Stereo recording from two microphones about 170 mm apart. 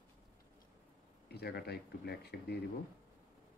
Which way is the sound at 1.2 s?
70° left (ahead or behind).